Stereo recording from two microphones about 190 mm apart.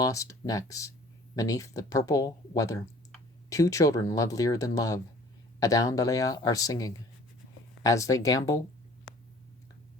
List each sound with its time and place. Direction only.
0.0 s speech: 15° left (ahead or behind)